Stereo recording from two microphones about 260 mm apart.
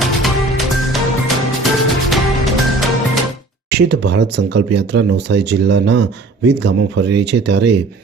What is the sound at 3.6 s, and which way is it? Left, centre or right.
Speech, right.